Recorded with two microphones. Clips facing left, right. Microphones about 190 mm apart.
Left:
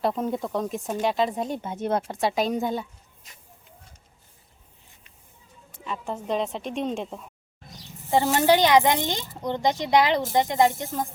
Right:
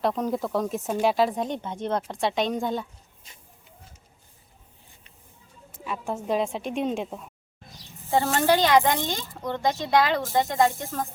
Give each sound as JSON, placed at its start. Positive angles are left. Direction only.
{"t": 0.0, "sound": "speech", "side_deg": 0}
{"t": 5.8, "sound": "speech", "side_deg": -5}
{"t": 8.1, "sound": "speech", "side_deg": 15}